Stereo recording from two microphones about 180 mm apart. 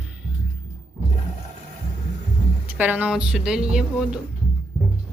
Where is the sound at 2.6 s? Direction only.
10° right (ahead or behind).